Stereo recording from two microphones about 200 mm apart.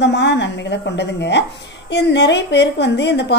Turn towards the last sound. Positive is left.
turn(degrees=60)  # may be behind; listen again after turning